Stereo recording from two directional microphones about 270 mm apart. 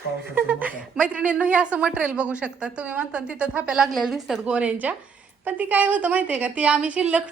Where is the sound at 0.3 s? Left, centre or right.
Centre.